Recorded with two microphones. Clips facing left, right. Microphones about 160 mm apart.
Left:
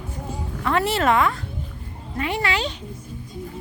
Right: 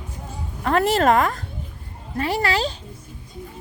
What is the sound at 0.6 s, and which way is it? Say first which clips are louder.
Speech: right 3 dB; 45° right (ahead or behind).